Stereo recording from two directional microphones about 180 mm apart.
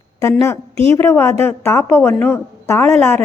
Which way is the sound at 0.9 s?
15° left (ahead or behind).